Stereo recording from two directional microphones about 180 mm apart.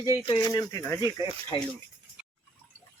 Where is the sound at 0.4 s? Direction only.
20° left (ahead or behind).